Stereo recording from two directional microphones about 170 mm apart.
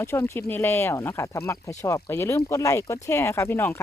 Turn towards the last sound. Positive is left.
turn(degrees=15)  # may be behind; listen again after turning